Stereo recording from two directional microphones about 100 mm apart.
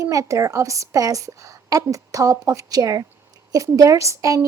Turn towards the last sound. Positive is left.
turn(degrees=-35)  # may be behind; listen again after turning